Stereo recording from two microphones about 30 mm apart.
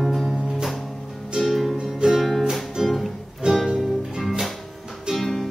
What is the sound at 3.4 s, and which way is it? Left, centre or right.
Music, right.